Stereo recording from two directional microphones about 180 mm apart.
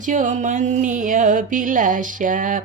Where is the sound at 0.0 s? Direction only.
45° right (ahead or behind).